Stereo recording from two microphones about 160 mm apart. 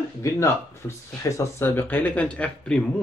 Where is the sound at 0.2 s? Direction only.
20° left (ahead or behind).